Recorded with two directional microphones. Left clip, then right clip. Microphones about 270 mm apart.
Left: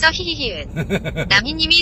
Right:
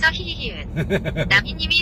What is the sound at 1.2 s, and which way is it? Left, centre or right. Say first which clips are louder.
Speech: left 4 dB; centre.